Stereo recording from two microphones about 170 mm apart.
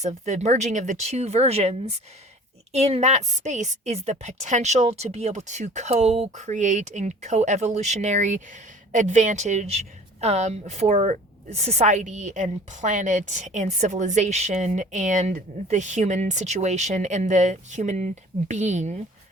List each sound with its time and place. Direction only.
0.3 s a woman's voice: 45° right (ahead or behind)